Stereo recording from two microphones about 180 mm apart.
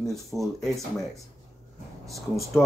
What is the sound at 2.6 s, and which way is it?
Speech, 5° right (ahead or behind).